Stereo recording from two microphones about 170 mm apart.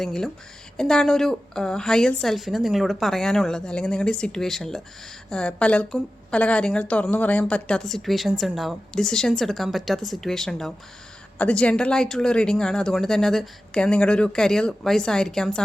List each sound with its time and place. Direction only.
0.0 s a woman's voice: 5° left (ahead or behind)